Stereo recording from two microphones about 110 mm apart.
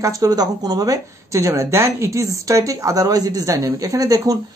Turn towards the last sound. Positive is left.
turn(degrees=-30)  # may be behind; listen again after turning